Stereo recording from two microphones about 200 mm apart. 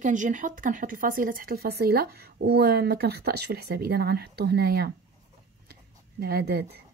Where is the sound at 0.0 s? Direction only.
40° right (ahead or behind).